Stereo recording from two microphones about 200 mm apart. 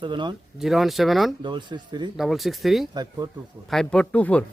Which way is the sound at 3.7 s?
5° left (ahead or behind).